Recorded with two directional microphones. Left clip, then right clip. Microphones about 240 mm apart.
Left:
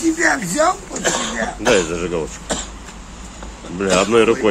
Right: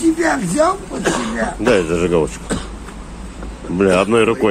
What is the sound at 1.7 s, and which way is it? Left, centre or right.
Speech, centre.